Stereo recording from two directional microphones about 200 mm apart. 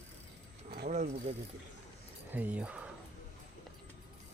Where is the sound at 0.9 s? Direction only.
35° right (ahead or behind).